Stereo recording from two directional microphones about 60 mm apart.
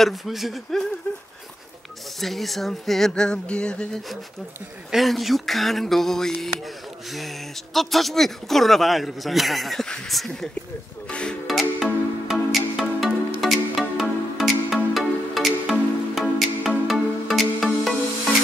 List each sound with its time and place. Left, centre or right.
0.0 s a man's voice: centre
2.1 s speech: centre
4.9 s a man's voice: centre
7.7 s a man's voice: centre
11.1 s speech: centre
11.4 s music: centre